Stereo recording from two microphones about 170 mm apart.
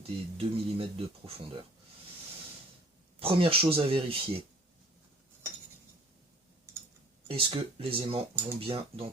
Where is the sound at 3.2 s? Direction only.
35° right (ahead or behind).